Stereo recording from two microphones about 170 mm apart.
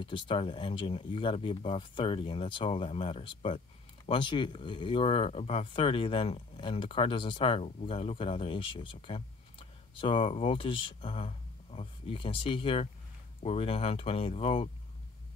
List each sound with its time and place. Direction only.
0.0 s speech: 30° left (ahead or behind)